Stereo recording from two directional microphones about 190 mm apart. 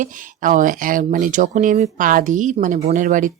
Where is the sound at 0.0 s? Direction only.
45° right (ahead or behind).